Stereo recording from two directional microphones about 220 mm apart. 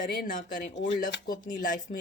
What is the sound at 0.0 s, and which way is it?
Speech, 35° left (ahead or behind).